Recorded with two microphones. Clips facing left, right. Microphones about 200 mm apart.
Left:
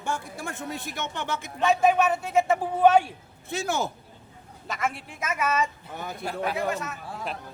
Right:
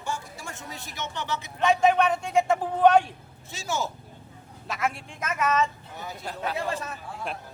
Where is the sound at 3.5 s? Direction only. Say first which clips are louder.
Left 3 dB; 55° left (ahead or behind).